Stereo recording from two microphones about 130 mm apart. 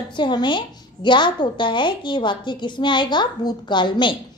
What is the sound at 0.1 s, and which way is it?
A woman's voice, 35° left (ahead or behind).